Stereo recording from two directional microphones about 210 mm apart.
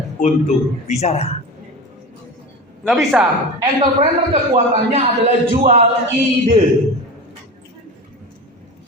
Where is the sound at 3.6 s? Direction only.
30° right (ahead or behind).